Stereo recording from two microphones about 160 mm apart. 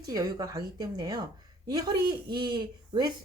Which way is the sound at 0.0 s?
25° right (ahead or behind).